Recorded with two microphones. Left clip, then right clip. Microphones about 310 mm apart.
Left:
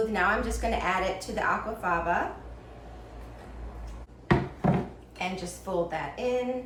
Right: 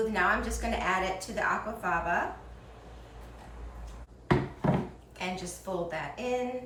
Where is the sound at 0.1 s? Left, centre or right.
Centre.